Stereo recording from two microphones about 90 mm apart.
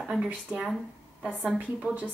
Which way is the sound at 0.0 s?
5° right (ahead or behind).